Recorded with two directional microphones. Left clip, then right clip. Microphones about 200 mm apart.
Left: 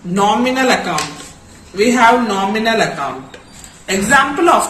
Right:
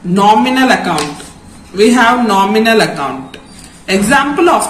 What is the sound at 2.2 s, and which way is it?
Speech, 10° left (ahead or behind).